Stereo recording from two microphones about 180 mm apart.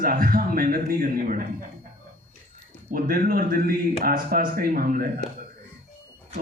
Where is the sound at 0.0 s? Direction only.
55° right (ahead or behind).